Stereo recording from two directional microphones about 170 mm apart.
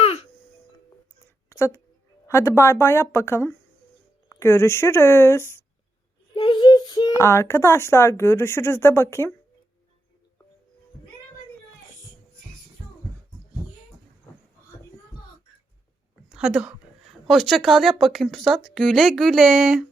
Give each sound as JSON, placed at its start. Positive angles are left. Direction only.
{"t": 1.5, "sound": "a sound", "side_deg": 15}
{"t": 2.2, "sound": "speech", "side_deg": 15}
{"t": 6.3, "sound": "a child's voice", "side_deg": 25}
{"t": 16.3, "sound": "a woman's voice", "side_deg": -5}